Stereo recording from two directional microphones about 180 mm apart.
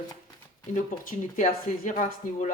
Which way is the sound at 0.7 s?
45° left (ahead or behind).